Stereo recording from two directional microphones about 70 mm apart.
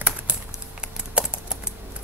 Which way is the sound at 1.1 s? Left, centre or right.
Centre.